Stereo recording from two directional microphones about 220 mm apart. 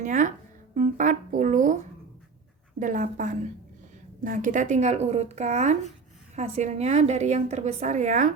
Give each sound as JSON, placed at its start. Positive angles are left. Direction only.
{"t": 0.0, "sound": "a woman's voice", "side_deg": -35}